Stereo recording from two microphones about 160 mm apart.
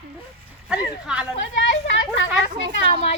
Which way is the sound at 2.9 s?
40° left (ahead or behind).